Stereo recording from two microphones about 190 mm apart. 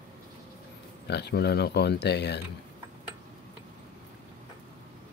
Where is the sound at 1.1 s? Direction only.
60° left (ahead or behind).